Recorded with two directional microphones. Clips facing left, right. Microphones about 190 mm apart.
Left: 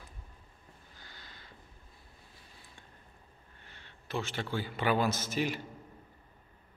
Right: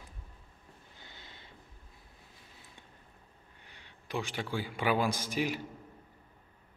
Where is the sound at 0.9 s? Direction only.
25° right (ahead or behind).